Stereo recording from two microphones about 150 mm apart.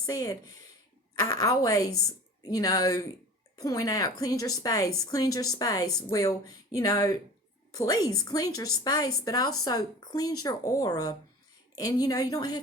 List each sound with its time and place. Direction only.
0.0 s a woman's voice: 25° left (ahead or behind)